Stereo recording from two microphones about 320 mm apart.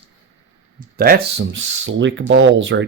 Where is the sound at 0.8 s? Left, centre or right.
Right.